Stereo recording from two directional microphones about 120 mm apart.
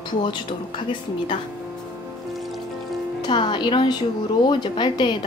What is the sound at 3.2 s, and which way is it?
A woman's voice, 40° left (ahead or behind).